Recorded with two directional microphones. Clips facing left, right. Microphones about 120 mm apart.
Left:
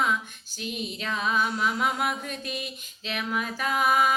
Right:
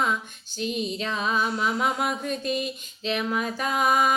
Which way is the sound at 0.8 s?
30° right (ahead or behind).